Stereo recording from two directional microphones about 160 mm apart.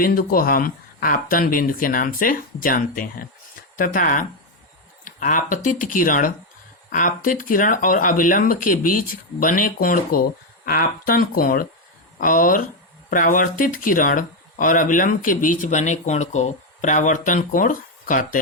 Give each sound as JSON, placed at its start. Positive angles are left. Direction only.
{"t": 0.0, "sound": "speech", "side_deg": 65}